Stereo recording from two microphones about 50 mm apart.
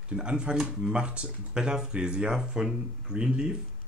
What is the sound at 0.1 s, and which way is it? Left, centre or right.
Speech, right.